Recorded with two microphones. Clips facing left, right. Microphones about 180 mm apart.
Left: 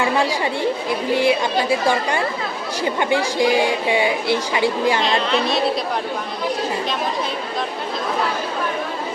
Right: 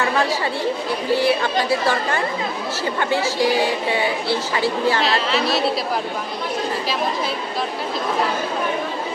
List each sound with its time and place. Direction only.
1.1 s a woman's voice: 15° left (ahead or behind)
5.0 s a woman's voice: 5° right (ahead or behind)